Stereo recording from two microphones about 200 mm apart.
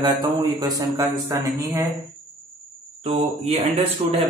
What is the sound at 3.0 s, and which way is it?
Speech, 30° right (ahead or behind).